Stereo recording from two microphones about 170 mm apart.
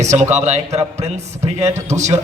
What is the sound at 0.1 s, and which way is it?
A man's voice, 40° right (ahead or behind).